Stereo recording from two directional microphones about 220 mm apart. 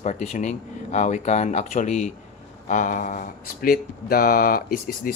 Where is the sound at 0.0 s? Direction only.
30° left (ahead or behind).